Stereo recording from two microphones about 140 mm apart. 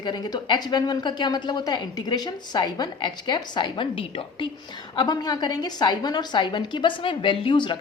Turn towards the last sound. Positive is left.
turn(degrees=35)  # may be behind; listen again after turning